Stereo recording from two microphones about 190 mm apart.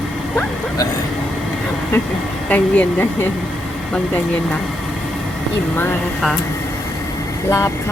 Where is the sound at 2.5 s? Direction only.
10° left (ahead or behind).